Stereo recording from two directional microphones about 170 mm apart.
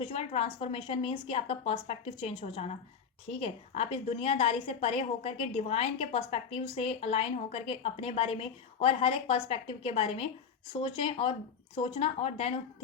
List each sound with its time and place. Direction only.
0.0 s a woman's voice: 35° left (ahead or behind)